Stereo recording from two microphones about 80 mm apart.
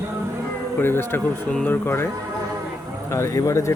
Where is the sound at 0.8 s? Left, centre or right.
Left.